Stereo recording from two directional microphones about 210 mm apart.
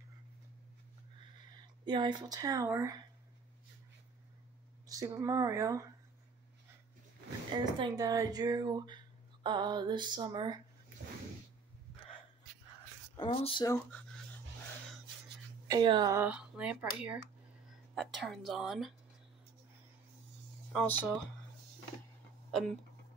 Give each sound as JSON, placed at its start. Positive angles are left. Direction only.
{"t": 1.9, "sound": "speech", "side_deg": -20}
{"t": 4.8, "sound": "speech", "side_deg": -15}
{"t": 7.5, "sound": "speech", "side_deg": -20}
{"t": 13.1, "sound": "speech", "side_deg": 25}
{"t": 13.7, "sound": "speech", "side_deg": 5}
{"t": 15.7, "sound": "a woman's voice", "side_deg": -20}
{"t": 20.7, "sound": "speech", "side_deg": 5}